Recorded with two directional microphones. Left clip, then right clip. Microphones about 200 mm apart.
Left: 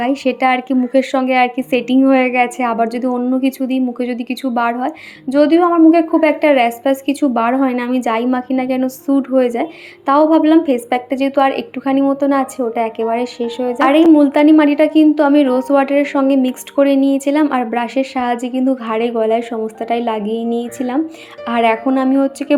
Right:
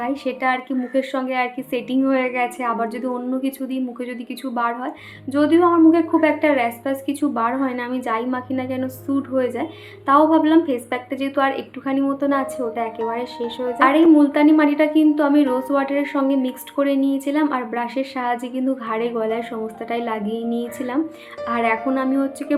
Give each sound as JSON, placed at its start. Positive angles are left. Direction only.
{"t": 0.0, "sound": "a woman's voice", "side_deg": 35}